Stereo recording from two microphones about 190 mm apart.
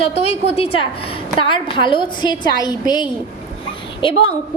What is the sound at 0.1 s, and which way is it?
A woman's voice, 35° left (ahead or behind).